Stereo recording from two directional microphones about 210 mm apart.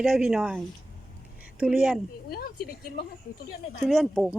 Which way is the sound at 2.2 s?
45° left (ahead or behind).